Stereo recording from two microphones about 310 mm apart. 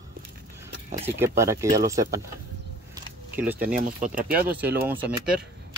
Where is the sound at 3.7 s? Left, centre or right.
Right.